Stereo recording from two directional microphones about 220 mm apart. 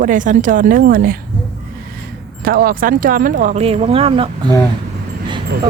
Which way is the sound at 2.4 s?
40° right (ahead or behind).